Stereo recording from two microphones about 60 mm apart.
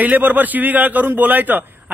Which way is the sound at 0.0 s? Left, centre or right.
Right.